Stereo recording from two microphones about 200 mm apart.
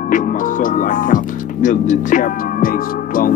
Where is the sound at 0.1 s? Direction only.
40° left (ahead or behind).